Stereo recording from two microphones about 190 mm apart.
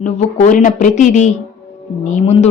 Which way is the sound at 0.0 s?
35° left (ahead or behind).